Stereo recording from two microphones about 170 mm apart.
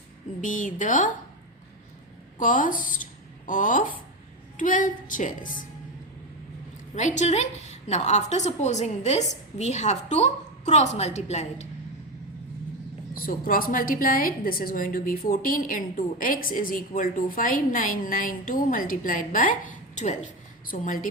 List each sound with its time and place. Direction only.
0.4 s a woman's voice: 50° left (ahead or behind)
2.4 s a woman's voice: 50° left (ahead or behind)
6.9 s a woman's voice: 45° left (ahead or behind)
13.1 s a woman's voice: 55° left (ahead or behind)